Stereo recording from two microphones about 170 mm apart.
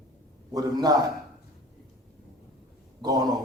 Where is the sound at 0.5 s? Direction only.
20° right (ahead or behind).